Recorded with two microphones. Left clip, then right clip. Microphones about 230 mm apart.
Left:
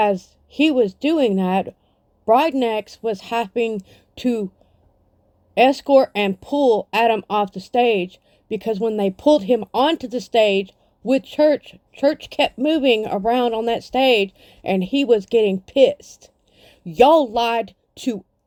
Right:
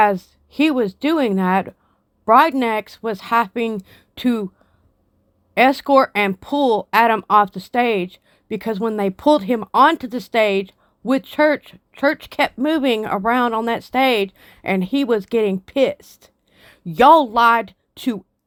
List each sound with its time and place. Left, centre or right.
0.0 s speech: centre
5.5 s speech: centre